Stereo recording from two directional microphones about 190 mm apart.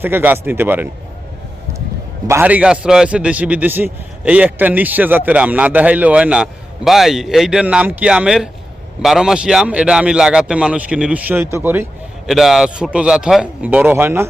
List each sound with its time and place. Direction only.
0.0 s a man's voice: 10° right (ahead or behind)
2.2 s a man's voice: 10° right (ahead or behind)